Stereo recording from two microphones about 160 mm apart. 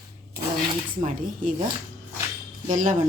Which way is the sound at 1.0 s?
55° right (ahead or behind).